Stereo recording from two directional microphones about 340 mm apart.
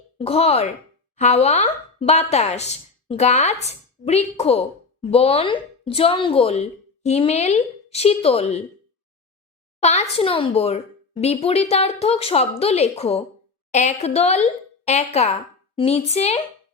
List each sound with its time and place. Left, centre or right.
0.2 s speech: centre
9.8 s speech: centre